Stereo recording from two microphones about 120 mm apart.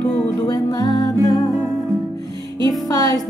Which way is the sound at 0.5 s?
30° left (ahead or behind).